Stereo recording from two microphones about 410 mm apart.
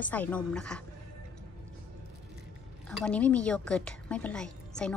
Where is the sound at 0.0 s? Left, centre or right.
Centre.